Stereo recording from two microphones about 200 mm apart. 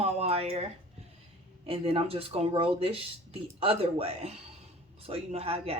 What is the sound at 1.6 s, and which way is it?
Speech, 30° right (ahead or behind).